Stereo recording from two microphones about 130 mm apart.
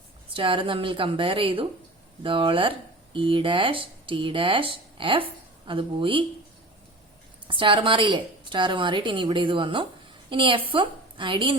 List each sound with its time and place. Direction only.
0.3 s speech: 40° right (ahead or behind)
7.4 s a woman's voice: 40° right (ahead or behind)